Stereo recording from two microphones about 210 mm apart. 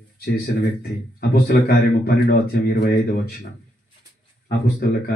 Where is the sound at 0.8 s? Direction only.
45° left (ahead or behind).